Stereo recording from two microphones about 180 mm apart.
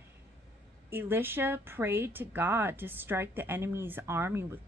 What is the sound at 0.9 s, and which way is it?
Speech, 10° right (ahead or behind).